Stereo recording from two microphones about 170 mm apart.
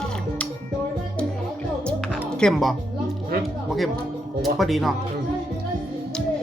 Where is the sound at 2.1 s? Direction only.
5° left (ahead or behind).